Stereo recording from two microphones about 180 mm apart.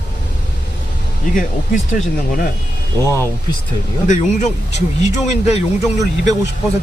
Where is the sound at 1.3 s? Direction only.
45° left (ahead or behind).